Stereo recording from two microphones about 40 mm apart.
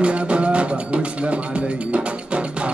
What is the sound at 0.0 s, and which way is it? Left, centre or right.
Music, right.